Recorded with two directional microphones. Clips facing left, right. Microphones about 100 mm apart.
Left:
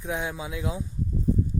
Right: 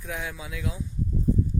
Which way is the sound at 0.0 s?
20° left (ahead or behind).